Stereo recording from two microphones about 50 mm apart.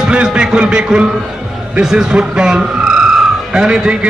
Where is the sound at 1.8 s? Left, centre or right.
Centre.